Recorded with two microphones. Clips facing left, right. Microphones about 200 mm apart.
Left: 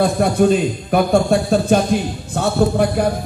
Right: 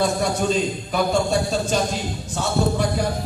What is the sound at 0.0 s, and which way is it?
A man's voice, 55° left (ahead or behind).